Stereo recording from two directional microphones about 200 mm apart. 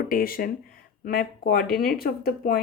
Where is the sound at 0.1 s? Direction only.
45° left (ahead or behind).